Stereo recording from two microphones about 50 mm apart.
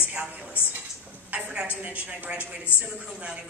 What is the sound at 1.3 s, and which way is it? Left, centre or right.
Speech, right.